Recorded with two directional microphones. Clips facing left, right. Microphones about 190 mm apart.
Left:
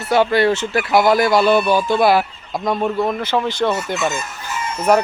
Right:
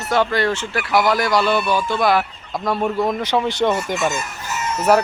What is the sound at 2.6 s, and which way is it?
Speech, 5° right (ahead or behind).